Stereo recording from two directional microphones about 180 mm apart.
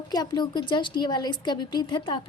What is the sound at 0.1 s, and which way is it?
A woman's voice, 20° left (ahead or behind).